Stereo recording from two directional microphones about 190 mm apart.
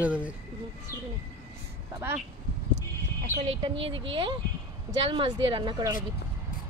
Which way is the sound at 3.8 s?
25° right (ahead or behind).